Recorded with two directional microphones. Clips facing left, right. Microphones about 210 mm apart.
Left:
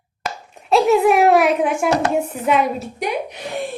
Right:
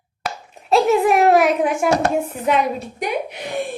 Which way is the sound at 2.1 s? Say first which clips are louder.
Left 1 dB; centre (ahead or behind).